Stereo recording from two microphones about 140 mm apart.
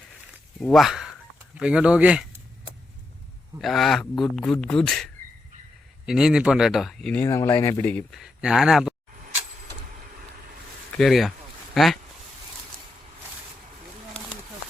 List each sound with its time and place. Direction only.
0.6 s speech: centre (ahead or behind)
3.6 s speech: centre (ahead or behind)
6.1 s speech: 5° right (ahead or behind)
7.3 s speech: 20° left (ahead or behind)
8.1 s speech: 5° right (ahead or behind)
10.9 s speech: centre (ahead or behind)